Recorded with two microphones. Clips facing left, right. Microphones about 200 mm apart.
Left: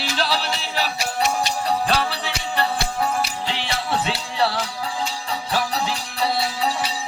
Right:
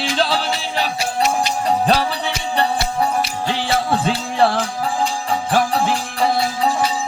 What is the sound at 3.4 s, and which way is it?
Music, 45° right (ahead or behind).